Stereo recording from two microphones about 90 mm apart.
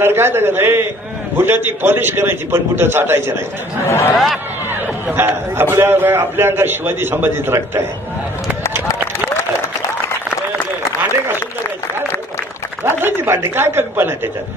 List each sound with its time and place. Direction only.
0.0 s a man's voice: 25° right (ahead or behind)
3.8 s speech: 30° left (ahead or behind)
4.6 s a man's voice: 20° right (ahead or behind)
12.8 s speech: 25° right (ahead or behind)